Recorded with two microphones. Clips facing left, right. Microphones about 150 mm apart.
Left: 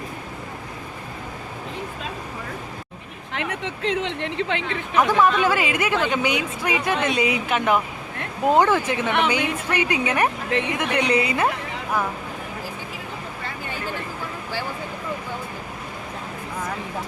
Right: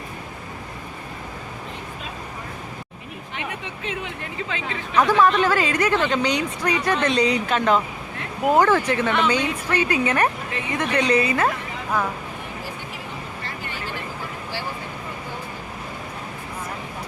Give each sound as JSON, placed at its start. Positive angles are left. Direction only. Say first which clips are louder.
{"t": 3.3, "sound": "speech", "louder": "left 5 dB", "side_deg": 90}
{"t": 4.9, "sound": "speech", "louder": "right 1 dB", "side_deg": 15}